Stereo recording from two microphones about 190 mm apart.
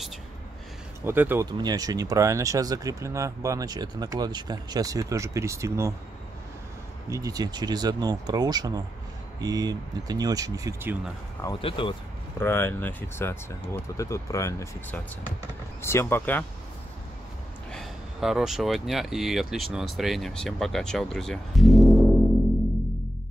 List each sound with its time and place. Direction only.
1.0 s speech: 10° right (ahead or behind)
7.1 s speech: 20° right (ahead or behind)
11.6 s speech: 25° left (ahead or behind)
12.4 s speech: 10° left (ahead or behind)
17.7 s speech: centre (ahead or behind)